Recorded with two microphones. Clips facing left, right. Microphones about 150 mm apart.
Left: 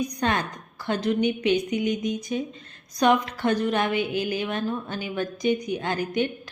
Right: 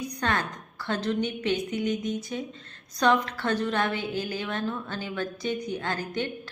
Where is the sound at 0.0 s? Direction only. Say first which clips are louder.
Left 3 dB; 15° left (ahead or behind).